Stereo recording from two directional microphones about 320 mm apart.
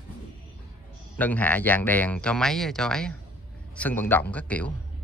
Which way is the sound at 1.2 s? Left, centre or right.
Centre.